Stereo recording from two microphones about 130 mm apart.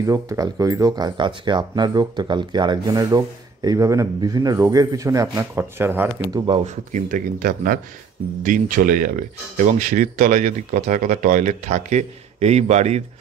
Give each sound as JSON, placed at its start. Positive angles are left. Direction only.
{"t": 0.0, "sound": "speech", "side_deg": -25}
{"t": 6.5, "sound": "speech", "side_deg": -65}